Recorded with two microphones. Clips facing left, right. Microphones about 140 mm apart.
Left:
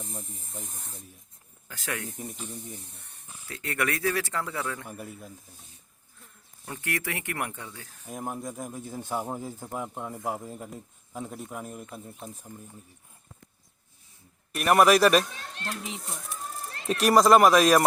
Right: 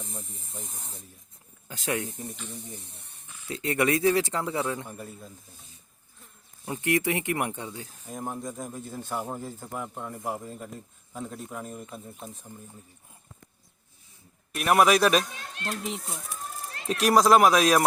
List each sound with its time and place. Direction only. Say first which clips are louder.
0.0 s speech: left 1 dB; centre (ahead or behind)
1.6 s speech: right 5 dB; 20° right (ahead or behind)
3.5 s speech: right 5 dB; 20° right (ahead or behind)
4.9 s speech: even; 10° left (ahead or behind)
6.7 s speech: right 7 dB; 20° right (ahead or behind)
8.0 s speech: even; 10° left (ahead or behind)
14.5 s speech: left 1 dB; centre (ahead or behind)